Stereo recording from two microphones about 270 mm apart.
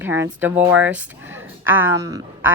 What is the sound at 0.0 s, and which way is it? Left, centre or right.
Speech, centre.